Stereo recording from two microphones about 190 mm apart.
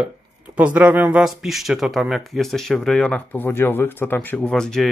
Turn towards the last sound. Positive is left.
turn(degrees=5)  # may be behind; listen again after turning